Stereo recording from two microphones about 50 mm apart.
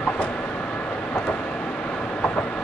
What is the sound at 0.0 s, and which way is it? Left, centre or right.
Vehicle, left.